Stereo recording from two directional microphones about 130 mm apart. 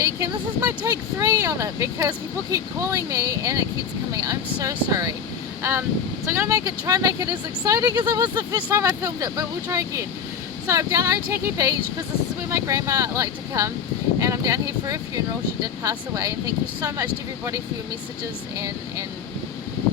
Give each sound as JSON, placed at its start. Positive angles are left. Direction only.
{"t": 0.0, "sound": "a sound", "side_deg": -25}
{"t": 0.8, "sound": "speech", "side_deg": -25}
{"t": 6.2, "sound": "speech", "side_deg": -20}